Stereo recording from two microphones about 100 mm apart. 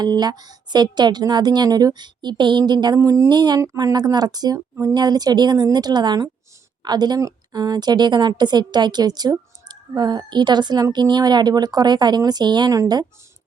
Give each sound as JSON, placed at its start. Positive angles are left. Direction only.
{"t": 0.0, "sound": "a woman's voice", "side_deg": -45}